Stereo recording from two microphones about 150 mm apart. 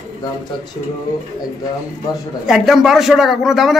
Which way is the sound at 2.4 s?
Centre (ahead or behind).